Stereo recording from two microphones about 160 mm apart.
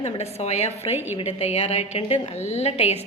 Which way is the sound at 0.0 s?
40° left (ahead or behind).